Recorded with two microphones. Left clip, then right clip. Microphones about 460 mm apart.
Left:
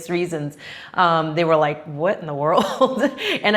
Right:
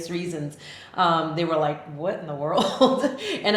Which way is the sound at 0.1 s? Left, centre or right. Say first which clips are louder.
Left 10 dB; left.